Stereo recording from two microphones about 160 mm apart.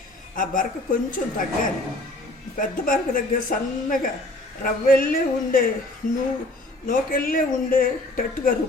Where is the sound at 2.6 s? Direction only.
60° left (ahead or behind).